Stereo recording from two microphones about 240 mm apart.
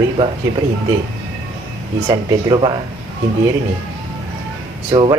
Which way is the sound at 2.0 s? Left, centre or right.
Centre.